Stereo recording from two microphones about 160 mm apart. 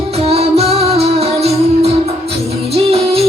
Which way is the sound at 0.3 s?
40° right (ahead or behind).